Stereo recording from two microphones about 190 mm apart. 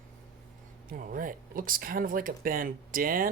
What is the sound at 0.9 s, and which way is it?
Speech, 45° right (ahead or behind).